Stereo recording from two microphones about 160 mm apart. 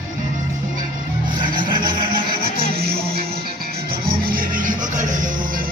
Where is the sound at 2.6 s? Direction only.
75° right (ahead or behind); by 5.3 s 55° right (ahead or behind).